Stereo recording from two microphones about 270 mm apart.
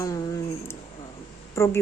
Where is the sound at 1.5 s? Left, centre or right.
Centre.